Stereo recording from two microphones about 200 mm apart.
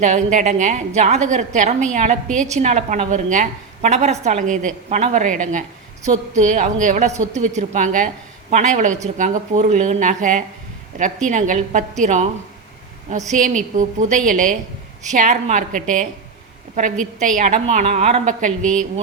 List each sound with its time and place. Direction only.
0.0 s a woman's voice: 40° right (ahead or behind)
18.6 s a woman's voice: 5° left (ahead or behind)